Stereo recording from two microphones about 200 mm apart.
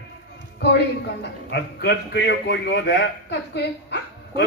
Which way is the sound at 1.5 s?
55° left (ahead or behind).